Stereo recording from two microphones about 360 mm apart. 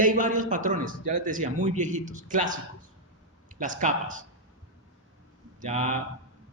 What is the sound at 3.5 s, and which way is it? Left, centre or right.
Speech, right.